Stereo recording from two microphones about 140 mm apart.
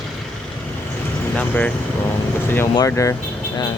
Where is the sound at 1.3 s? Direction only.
10° left (ahead or behind).